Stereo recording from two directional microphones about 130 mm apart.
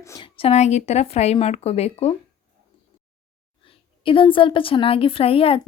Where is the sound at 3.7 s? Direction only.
45° left (ahead or behind).